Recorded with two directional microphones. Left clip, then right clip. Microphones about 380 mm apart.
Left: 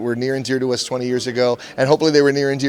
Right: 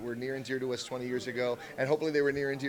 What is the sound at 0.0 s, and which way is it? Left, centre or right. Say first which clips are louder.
A man's voice: left 15 dB; left.